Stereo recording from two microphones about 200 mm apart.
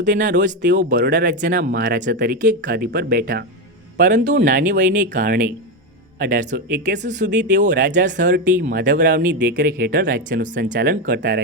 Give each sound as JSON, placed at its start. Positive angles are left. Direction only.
{"t": 0.0, "sound": "speech", "side_deg": -40}
{"t": 0.9, "sound": "speech", "side_deg": -60}
{"t": 1.2, "sound": "speech", "side_deg": -40}